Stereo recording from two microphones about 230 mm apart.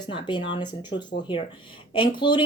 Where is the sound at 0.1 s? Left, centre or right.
Left.